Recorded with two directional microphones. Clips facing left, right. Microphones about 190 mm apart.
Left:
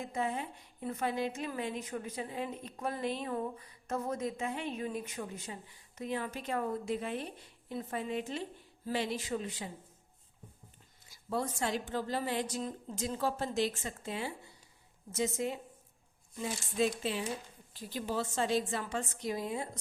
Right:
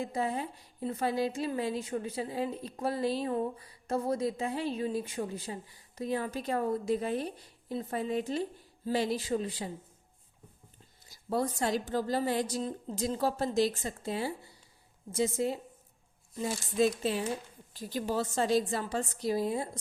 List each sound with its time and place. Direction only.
0.0 s a woman's voice: 35° right (ahead or behind)
11.1 s a woman's voice: 40° right (ahead or behind)